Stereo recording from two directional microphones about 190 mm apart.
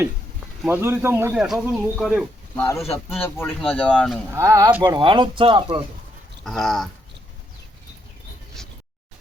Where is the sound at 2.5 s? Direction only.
10° left (ahead or behind).